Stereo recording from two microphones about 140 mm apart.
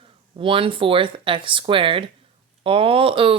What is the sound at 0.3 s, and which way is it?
Speech, 40° right (ahead or behind).